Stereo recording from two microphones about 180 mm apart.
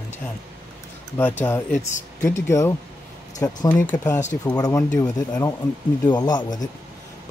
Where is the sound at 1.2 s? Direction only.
10° left (ahead or behind).